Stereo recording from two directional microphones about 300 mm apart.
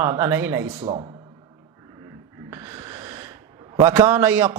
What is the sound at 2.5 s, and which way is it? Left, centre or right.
Snort, centre.